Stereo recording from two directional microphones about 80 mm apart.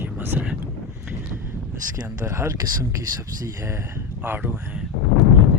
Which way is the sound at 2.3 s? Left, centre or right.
Right.